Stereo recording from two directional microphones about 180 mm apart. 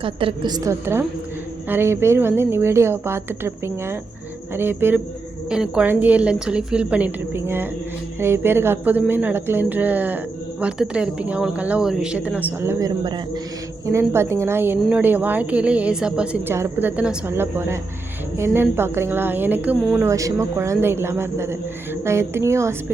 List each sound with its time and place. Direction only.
0.0 s a woman's voice: 30° right (ahead or behind); by 12.9 s 10° right (ahead or behind)
13.9 s a woman's voice: 15° right (ahead or behind)